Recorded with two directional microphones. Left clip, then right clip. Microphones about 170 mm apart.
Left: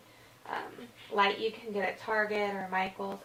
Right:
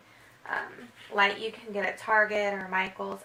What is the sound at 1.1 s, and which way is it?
A woman's voice, 25° right (ahead or behind).